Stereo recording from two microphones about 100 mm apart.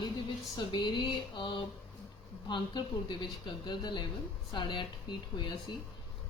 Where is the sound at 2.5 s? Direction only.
50° left (ahead or behind).